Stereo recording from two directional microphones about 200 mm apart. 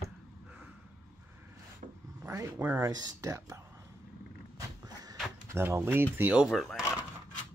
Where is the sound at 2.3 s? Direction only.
15° right (ahead or behind).